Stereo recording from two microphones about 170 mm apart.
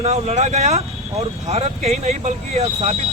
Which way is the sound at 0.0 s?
40° right (ahead or behind).